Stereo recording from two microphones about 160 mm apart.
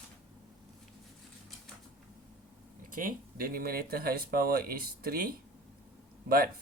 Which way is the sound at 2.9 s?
60° right (ahead or behind).